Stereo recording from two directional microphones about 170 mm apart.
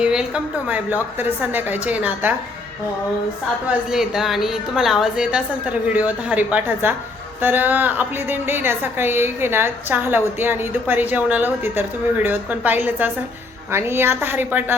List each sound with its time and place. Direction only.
0.0 s a woman's voice: 5° right (ahead or behind)
3.7 s a woman's voice: 5° right (ahead or behind)